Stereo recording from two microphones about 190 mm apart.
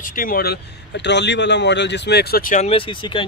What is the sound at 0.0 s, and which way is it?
Speech, 45° left (ahead or behind).